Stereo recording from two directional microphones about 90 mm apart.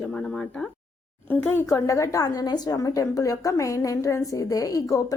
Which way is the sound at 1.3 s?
25° left (ahead or behind).